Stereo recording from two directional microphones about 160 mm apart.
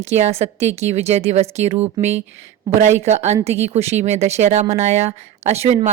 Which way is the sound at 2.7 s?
20° right (ahead or behind).